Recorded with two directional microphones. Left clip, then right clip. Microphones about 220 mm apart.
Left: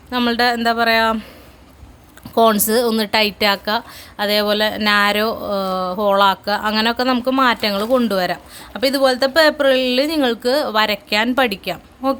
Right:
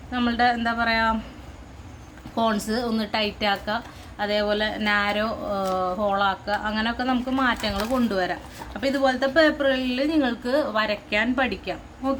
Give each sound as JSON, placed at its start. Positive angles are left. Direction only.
{"t": 0.1, "sound": "a woman's voice", "side_deg": 50}
{"t": 2.3, "sound": "a woman's voice", "side_deg": 50}